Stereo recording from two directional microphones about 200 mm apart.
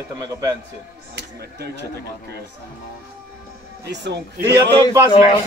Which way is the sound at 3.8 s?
60° right (ahead or behind).